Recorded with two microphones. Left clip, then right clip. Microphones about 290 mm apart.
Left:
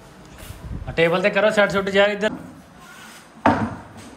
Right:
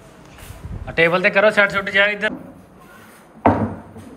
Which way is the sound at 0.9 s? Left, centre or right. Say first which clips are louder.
Right 3 dB; centre.